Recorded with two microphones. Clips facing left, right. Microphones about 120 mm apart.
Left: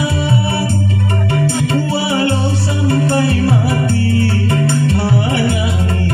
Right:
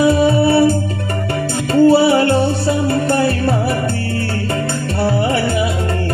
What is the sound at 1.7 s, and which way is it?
Music, 40° right (ahead or behind).